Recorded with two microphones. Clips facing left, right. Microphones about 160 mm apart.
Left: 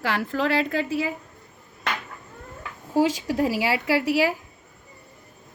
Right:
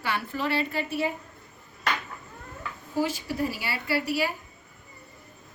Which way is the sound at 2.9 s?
90° left.